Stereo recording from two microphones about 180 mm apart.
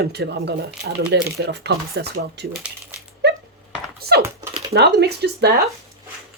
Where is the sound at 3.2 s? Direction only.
70° right (ahead or behind).